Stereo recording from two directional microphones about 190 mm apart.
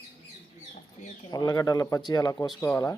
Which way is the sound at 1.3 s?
20° left (ahead or behind).